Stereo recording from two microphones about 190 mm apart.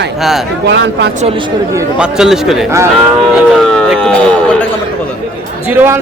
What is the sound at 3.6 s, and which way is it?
Speech, centre (ahead or behind).